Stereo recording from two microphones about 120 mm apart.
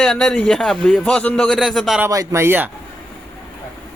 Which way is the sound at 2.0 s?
25° right (ahead or behind).